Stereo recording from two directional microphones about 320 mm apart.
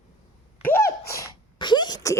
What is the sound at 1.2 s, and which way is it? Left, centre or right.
Sneeze, centre.